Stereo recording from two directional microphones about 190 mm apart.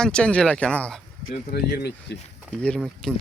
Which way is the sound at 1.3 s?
55° left (ahead or behind).